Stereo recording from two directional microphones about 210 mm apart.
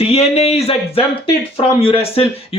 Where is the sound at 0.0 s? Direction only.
30° left (ahead or behind).